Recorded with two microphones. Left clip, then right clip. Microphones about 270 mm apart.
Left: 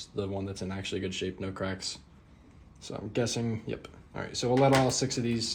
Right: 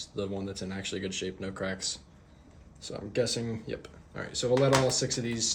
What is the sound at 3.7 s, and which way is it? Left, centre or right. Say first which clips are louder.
Speech: even; centre.